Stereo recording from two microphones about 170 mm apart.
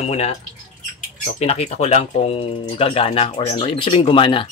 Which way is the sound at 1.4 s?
40° left (ahead or behind).